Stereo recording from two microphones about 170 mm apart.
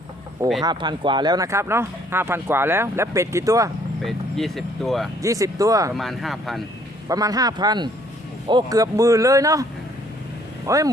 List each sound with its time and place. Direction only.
0.6 s speech: 25° right (ahead or behind)
4.0 s speech: centre (ahead or behind)
5.2 s speech: 20° right (ahead or behind)
5.9 s speech: centre (ahead or behind)
7.1 s speech: 20° right (ahead or behind)
10.7 s speech: 20° right (ahead or behind)